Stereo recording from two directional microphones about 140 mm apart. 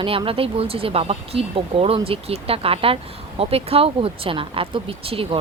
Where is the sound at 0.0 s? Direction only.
40° right (ahead or behind).